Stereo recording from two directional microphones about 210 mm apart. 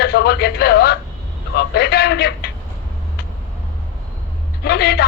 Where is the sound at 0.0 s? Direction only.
50° left (ahead or behind).